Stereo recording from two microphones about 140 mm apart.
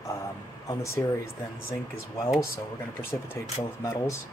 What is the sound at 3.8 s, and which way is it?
Speech, 20° left (ahead or behind).